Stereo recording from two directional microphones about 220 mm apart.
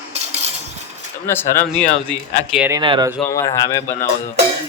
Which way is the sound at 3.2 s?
15° left (ahead or behind).